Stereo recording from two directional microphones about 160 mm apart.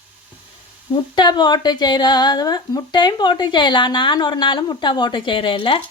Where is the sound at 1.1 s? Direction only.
25° left (ahead or behind).